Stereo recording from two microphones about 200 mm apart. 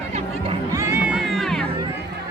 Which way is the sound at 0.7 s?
10° right (ahead or behind).